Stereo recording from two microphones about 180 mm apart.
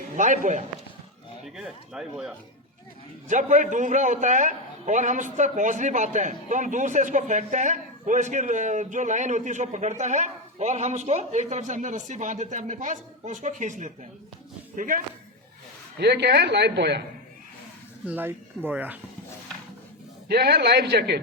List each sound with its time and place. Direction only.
0.2 s a man's voice: 45° right (ahead or behind)
1.5 s speech: 5° right (ahead or behind)
3.2 s a man's voice: 45° right (ahead or behind)
16.0 s speech: 65° right (ahead or behind)
18.1 s speech: 10° right (ahead or behind)
20.2 s a man's voice: 60° right (ahead or behind)